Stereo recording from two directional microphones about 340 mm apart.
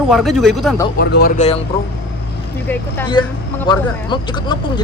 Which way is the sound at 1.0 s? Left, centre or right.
Left.